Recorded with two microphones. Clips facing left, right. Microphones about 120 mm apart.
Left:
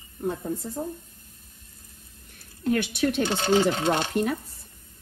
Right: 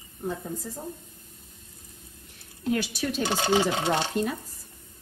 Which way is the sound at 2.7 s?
60° left (ahead or behind).